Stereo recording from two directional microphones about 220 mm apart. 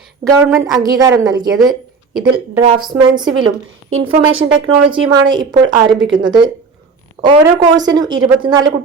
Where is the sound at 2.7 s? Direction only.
20° right (ahead or behind).